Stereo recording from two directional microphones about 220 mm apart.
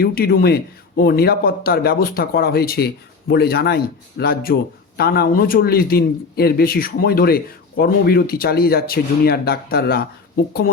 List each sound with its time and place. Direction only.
0.0 s speech: 45° left (ahead or behind)